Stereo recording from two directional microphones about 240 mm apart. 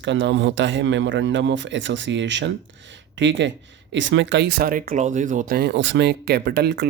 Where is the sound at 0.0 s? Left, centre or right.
Right.